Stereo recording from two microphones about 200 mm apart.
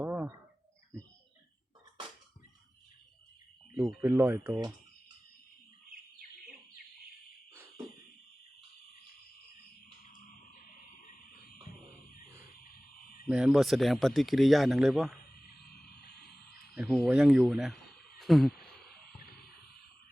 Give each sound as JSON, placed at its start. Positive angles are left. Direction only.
{"t": 0.0, "sound": "bird", "side_deg": -10}
{"t": 3.8, "sound": "speech", "side_deg": -15}
{"t": 10.0, "sound": "a sound", "side_deg": 40}
{"t": 13.2, "sound": "speech", "side_deg": -5}
{"t": 15.7, "sound": "a sound", "side_deg": 55}
{"t": 16.7, "sound": "speech", "side_deg": 0}